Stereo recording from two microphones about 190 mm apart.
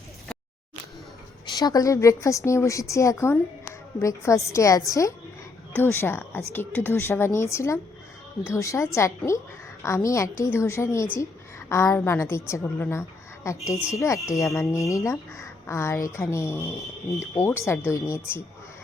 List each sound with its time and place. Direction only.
1.5 s a woman's voice: 20° left (ahead or behind)